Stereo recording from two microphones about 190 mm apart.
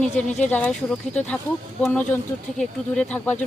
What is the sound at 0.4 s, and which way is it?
Speech, 5° left (ahead or behind).